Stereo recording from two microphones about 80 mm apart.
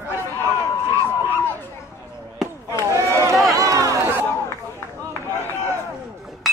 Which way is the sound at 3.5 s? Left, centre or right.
Right.